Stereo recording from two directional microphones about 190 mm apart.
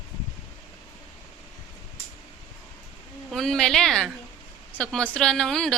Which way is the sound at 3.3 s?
5° left (ahead or behind).